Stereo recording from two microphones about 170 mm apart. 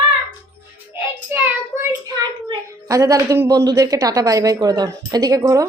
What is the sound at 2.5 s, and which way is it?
A woman's voice, 20° right (ahead or behind).